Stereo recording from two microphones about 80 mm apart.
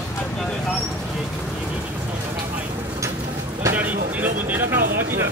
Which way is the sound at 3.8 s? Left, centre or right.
Right.